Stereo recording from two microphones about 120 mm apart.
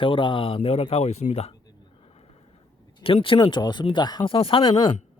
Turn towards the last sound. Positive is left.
turn(degrees=45)  # may be behind; listen again after turning